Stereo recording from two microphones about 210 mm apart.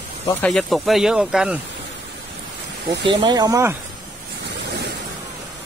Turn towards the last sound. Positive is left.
turn(degrees=-15)  # may be behind; listen again after turning